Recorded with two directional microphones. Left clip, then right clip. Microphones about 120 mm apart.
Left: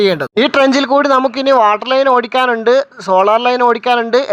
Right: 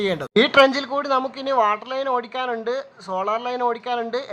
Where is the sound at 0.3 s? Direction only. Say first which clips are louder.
Left 2 dB; 60° left (ahead or behind).